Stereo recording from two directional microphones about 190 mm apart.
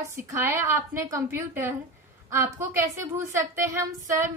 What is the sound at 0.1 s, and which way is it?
A woman's voice, 15° right (ahead or behind).